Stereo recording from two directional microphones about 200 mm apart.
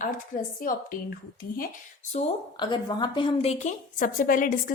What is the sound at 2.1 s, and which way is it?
Speech, 35° left (ahead or behind).